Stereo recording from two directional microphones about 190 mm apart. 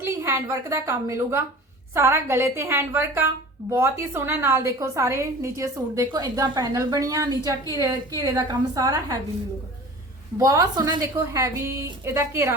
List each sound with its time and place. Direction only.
0.0 s a woman's voice: 15° right (ahead or behind)
10.3 s a woman's voice: 15° right (ahead or behind)